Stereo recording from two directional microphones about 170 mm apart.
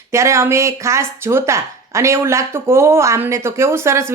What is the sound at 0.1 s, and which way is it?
A woman's voice, 15° right (ahead or behind).